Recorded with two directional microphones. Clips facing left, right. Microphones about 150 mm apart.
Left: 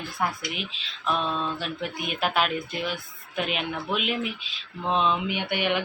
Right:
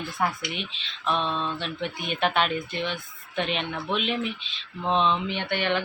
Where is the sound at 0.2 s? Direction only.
Centre (ahead or behind).